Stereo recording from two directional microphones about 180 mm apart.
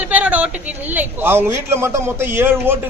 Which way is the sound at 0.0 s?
10° right (ahead or behind).